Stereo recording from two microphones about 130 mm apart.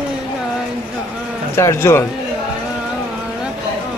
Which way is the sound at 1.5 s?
20° left (ahead or behind).